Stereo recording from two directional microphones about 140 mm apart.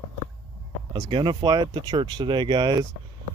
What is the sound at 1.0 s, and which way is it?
Speech, 35° right (ahead or behind).